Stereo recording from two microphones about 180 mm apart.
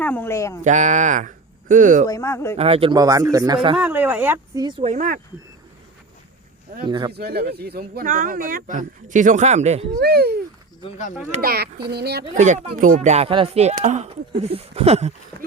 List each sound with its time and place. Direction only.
0.0 s a sound: 10° left (ahead or behind)
0.6 s speech: 40° right (ahead or behind)
2.0 s speech: 15° left (ahead or behind)
2.6 s speech: 35° right (ahead or behind)
3.8 s speech: 10° right (ahead or behind)
4.6 s speech: 30° right (ahead or behind)
6.8 s speech: 25° right (ahead or behind)
7.1 s speech: 65° right (ahead or behind); by 9.8 s 40° right (ahead or behind)
10.0 s a child's voice: 60° right (ahead or behind)
12.3 s speech: 40° right (ahead or behind)